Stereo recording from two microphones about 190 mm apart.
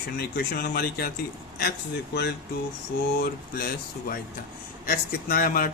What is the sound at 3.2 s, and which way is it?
Speech, 50° left (ahead or behind).